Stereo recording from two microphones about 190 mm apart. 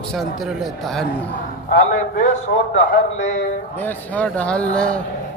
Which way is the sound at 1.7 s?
40° left (ahead or behind).